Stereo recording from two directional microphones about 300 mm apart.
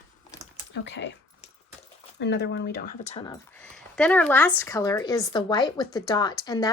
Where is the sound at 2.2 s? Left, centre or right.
Left.